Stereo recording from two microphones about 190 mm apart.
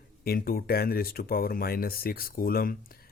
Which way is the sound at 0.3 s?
50° left (ahead or behind).